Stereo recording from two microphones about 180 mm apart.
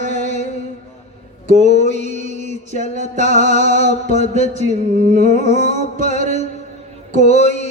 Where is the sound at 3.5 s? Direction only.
35° left (ahead or behind).